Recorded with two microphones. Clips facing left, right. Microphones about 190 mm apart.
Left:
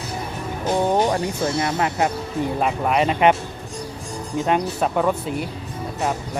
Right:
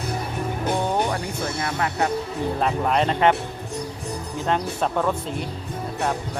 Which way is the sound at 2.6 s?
5° left (ahead or behind).